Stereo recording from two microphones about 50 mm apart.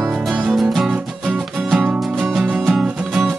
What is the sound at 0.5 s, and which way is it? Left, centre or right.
Music, centre.